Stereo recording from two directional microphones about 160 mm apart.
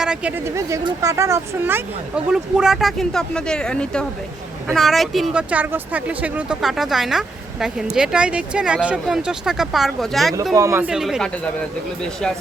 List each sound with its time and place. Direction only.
0.0 s speech: 5° right (ahead or behind)
10.5 s speech: 20° right (ahead or behind)
10.8 s speech: 5° right (ahead or behind)